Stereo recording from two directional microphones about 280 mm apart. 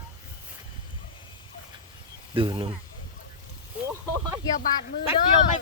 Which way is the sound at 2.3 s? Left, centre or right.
Centre.